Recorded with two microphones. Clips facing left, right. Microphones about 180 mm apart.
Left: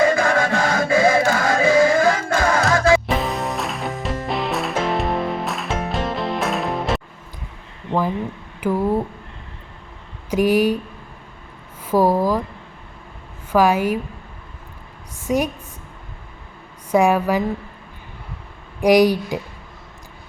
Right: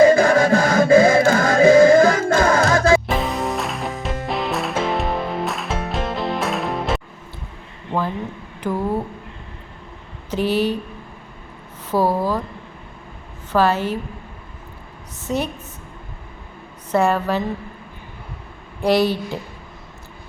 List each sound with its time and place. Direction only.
0.0 s music: 35° right (ahead or behind)
3.1 s music: centre (ahead or behind)
8.6 s a sound: 10° left (ahead or behind)
10.2 s speech: 10° left (ahead or behind)
11.9 s a sound: 10° left (ahead or behind)
13.5 s speech: 10° left (ahead or behind)
15.2 s a woman's voice: 10° left (ahead or behind)
16.9 s speech: 10° left (ahead or behind)
18.8 s speech: 15° left (ahead or behind)